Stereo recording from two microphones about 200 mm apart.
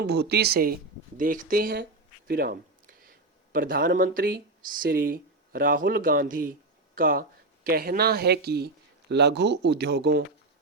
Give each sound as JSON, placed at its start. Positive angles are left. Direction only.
{"t": 0.0, "sound": "speech", "side_deg": -55}